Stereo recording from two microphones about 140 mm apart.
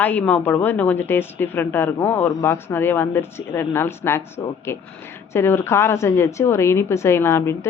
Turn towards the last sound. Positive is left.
turn(degrees=20)  # may be behind; listen again after turning